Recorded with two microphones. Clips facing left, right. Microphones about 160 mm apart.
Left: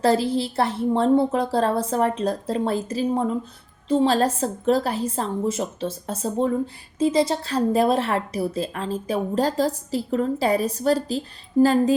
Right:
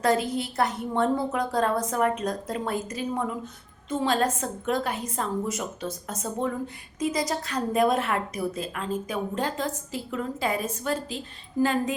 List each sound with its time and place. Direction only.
0.0 s a woman's voice: 30° left (ahead or behind)